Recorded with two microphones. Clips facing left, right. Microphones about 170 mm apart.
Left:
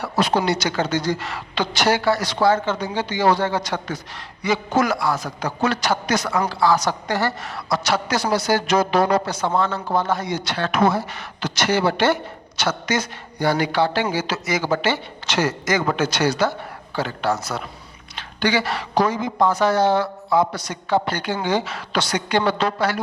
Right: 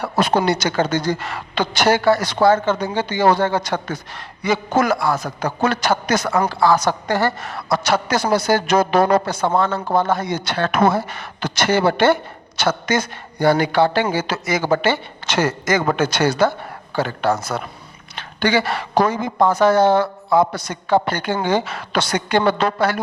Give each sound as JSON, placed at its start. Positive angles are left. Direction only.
{"t": 0.0, "sound": "a woman's voice", "side_deg": -50}